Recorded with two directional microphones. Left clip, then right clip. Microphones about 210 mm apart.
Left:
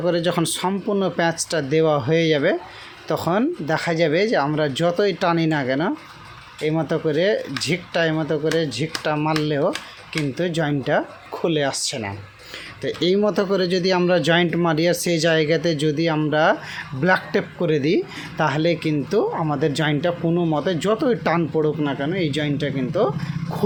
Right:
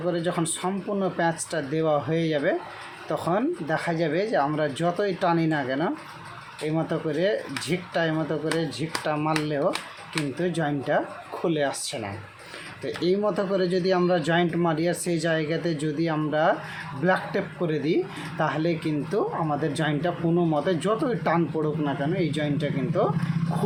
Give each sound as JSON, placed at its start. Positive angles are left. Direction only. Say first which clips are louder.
{"t": 0.1, "sound": "speech", "louder": "left 4 dB", "side_deg": 45}